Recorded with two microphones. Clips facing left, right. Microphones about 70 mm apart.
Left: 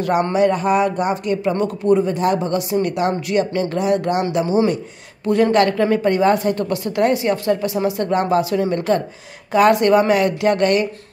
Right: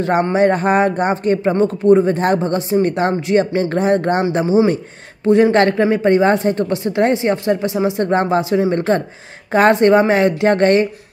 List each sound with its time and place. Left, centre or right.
0.0 s speech: right